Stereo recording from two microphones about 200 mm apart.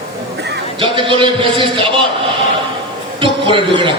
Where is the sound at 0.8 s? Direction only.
25° right (ahead or behind).